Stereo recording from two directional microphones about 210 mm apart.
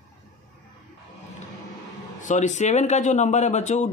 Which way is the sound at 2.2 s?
35° left (ahead or behind).